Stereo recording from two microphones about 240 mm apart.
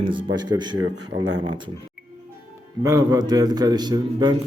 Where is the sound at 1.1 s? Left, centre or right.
Right.